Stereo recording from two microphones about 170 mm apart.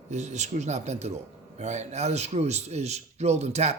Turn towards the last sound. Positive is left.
turn(degrees=-40)  # may be behind; listen again after turning